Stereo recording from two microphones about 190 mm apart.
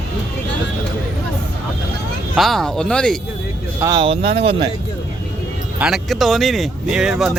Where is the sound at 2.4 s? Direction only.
Centre (ahead or behind).